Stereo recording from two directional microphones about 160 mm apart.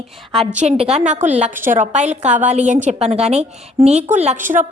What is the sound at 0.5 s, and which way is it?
A woman's voice, 45° right (ahead or behind).